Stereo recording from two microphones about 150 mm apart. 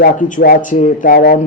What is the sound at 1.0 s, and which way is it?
Speech, 75° left (ahead or behind).